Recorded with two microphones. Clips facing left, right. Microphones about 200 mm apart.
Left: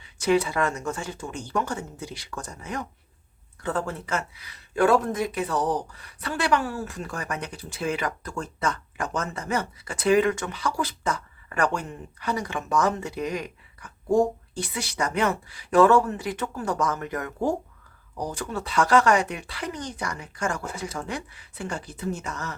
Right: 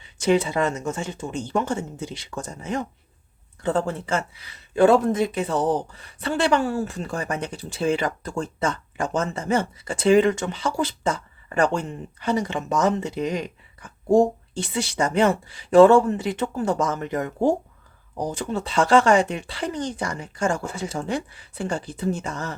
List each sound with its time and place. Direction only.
0.0 s speech: 25° right (ahead or behind)